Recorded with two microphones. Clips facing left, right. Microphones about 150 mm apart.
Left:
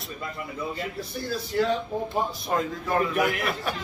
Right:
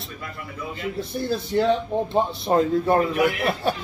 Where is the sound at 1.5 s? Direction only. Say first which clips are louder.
Right 4 dB; 30° right (ahead or behind).